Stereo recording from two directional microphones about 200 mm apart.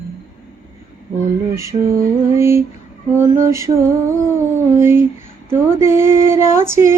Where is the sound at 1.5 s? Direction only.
15° right (ahead or behind).